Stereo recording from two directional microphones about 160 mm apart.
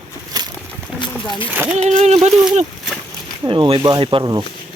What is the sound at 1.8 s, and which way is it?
Speech, 50° right (ahead or behind).